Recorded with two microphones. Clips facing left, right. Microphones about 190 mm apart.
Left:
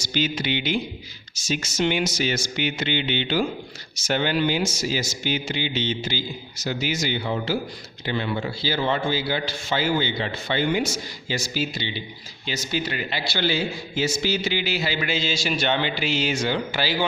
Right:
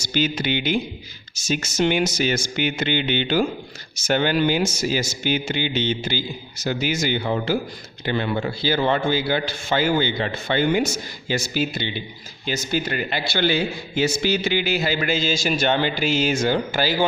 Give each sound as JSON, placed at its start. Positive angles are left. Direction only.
{"t": 0.0, "sound": "a man's voice", "side_deg": -50}